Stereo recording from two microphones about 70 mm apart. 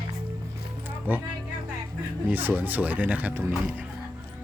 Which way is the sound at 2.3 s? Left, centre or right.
Right.